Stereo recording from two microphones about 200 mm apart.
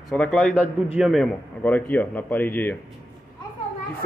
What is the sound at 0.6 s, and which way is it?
Speech, 5° right (ahead or behind).